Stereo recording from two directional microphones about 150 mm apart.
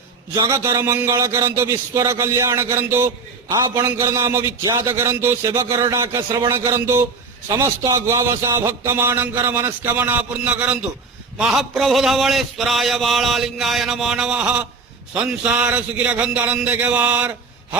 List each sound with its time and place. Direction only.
0.3 s a man's voice: 20° right (ahead or behind)